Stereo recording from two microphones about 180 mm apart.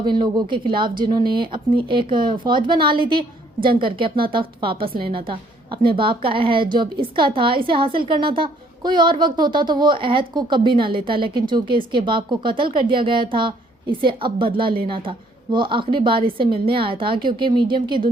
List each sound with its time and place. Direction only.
0.0 s a woman's voice: 25° right (ahead or behind)
5.9 s a woman's voice: 30° right (ahead or behind)